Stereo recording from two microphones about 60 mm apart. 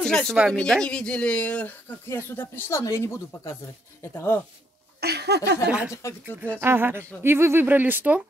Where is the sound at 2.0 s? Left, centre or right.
Left.